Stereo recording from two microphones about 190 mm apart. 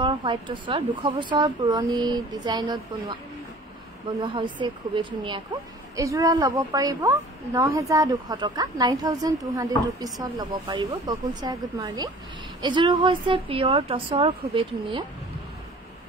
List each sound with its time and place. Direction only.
0.0 s a woman's voice: 25° right (ahead or behind)
4.2 s a woman's voice: 25° right (ahead or behind)